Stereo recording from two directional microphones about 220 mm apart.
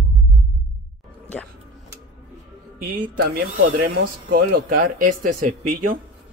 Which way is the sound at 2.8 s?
40° right (ahead or behind).